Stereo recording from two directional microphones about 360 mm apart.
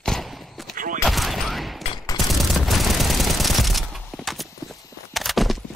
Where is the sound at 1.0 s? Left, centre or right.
Centre.